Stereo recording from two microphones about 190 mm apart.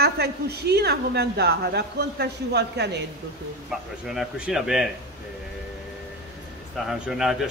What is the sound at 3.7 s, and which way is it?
Speech, centre (ahead or behind).